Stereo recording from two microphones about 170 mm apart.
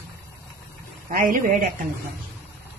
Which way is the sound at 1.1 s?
55° right (ahead or behind).